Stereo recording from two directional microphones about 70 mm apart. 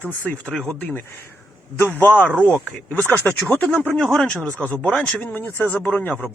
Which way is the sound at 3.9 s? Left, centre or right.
Centre.